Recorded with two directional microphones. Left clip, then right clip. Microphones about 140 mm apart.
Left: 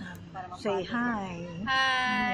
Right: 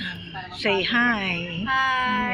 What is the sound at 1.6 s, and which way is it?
Speech, 30° left (ahead or behind).